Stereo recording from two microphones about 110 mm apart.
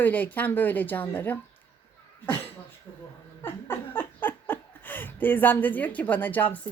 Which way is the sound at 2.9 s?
20° left (ahead or behind).